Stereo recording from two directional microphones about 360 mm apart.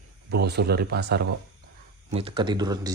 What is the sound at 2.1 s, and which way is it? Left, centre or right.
Speech, centre.